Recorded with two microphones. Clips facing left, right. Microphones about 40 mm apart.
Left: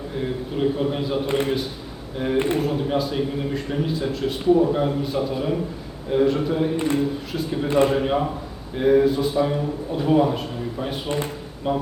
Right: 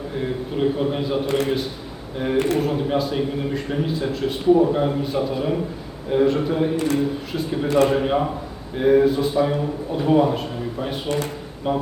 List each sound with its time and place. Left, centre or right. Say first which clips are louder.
0.2 s a man's voice: right 1 dB; centre
6.7 s speech: right 1 dB; left
7.0 s a man's voice: right 1 dB; centre